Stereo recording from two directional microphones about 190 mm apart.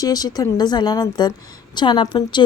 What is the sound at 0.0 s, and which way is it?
A woman's voice, 20° left (ahead or behind).